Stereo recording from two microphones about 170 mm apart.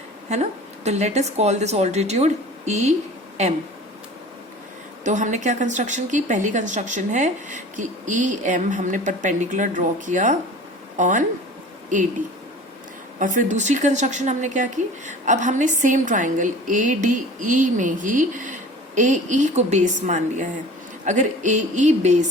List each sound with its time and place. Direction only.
0.3 s a woman's voice: 40° right (ahead or behind)
5.0 s a woman's voice: 45° right (ahead or behind)
13.1 s a woman's voice: 50° right (ahead or behind)